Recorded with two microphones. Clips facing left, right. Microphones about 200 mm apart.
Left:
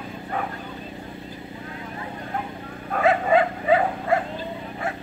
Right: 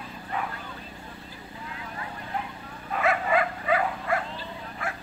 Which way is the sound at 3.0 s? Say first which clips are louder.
Left 6 dB; 30° left (ahead or behind).